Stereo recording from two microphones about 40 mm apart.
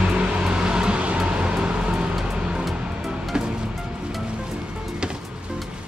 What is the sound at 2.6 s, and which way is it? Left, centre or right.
Music, centre.